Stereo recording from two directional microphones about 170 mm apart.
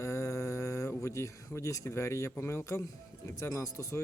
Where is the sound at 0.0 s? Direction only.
15° left (ahead or behind).